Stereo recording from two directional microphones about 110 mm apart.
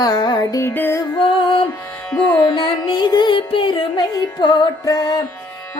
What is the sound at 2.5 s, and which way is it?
Music, 45° left (ahead or behind).